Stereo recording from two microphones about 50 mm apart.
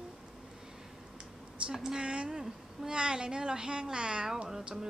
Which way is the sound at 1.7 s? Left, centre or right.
Centre.